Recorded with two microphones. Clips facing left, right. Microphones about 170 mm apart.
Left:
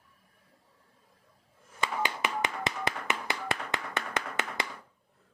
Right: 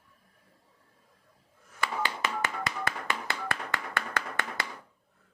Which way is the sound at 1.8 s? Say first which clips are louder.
Even; 20° left (ahead or behind).